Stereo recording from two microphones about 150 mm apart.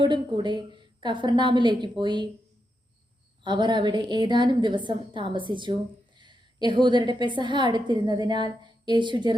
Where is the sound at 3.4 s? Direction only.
30° right (ahead or behind).